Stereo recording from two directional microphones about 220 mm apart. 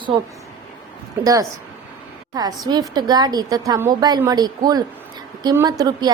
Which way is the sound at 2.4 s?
15° right (ahead or behind).